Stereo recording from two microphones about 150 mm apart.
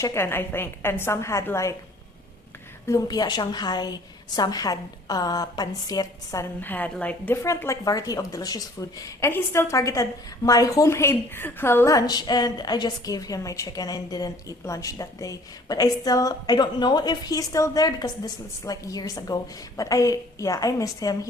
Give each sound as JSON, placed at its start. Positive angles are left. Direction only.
{"t": 0.0, "sound": "a woman's voice", "side_deg": 15}
{"t": 2.8, "sound": "a woman's voice", "side_deg": 25}
{"t": 7.4, "sound": "a woman's voice", "side_deg": 20}